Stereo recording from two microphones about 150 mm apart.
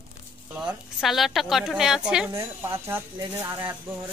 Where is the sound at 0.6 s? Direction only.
Centre (ahead or behind).